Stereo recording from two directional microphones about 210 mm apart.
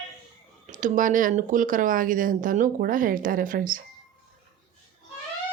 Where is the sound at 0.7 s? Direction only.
40° right (ahead or behind).